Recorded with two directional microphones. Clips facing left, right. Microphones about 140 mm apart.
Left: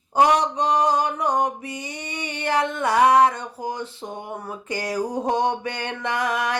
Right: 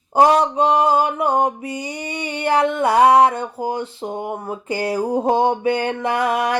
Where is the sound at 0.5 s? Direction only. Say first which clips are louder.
Right 4 dB; 30° right (ahead or behind).